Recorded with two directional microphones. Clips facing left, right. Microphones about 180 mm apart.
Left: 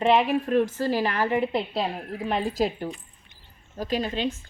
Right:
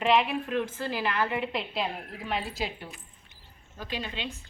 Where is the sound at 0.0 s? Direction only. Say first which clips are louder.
Left 4 dB; 35° left (ahead or behind).